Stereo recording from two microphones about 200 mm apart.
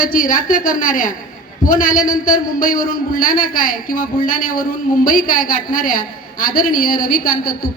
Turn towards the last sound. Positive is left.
turn(degrees=45)  # may be behind; listen again after turning